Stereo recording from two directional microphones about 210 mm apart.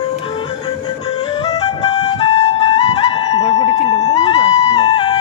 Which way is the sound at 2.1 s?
30° left (ahead or behind).